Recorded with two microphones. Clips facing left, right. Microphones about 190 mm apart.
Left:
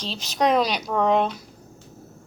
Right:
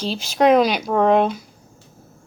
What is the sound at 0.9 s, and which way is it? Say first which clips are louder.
Speech: right 4 dB; 50° right (ahead or behind).